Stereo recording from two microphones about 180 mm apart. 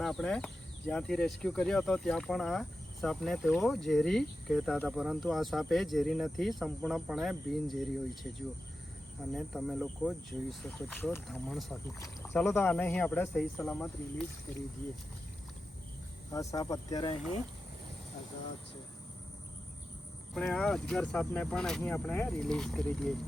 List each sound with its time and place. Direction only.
0.0 s speech: 5° left (ahead or behind)
9.3 s speech: centre (ahead or behind)
11.9 s speech: 15° left (ahead or behind)
16.3 s speech: 20° left (ahead or behind)
20.3 s speech: 5° left (ahead or behind)